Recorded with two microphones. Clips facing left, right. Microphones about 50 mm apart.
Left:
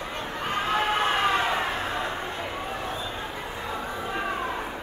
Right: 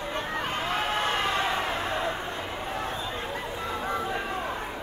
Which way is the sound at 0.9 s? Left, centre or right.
Centre.